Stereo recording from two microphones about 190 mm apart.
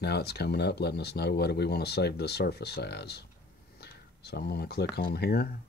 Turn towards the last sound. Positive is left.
turn(degrees=55)  # may be behind; listen again after turning